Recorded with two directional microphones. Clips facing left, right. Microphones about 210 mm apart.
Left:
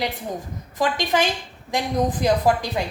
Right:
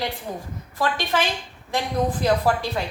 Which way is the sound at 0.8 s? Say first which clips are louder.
Left 2 dB; 15° left (ahead or behind).